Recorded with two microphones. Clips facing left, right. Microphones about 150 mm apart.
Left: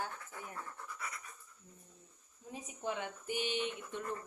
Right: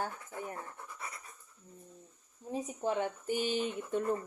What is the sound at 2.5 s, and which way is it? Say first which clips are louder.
Speech: right 7 dB; 35° right (ahead or behind).